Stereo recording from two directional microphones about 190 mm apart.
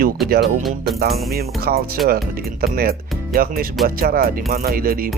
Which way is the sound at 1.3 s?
55° right (ahead or behind).